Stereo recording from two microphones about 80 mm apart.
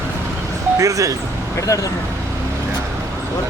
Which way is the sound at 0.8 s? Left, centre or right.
Right.